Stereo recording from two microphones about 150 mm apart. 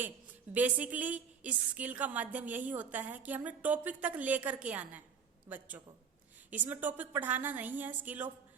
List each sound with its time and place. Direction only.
0.5 s a woman's voice: 10° right (ahead or behind)